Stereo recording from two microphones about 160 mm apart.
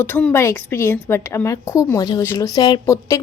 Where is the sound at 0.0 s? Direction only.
10° left (ahead or behind).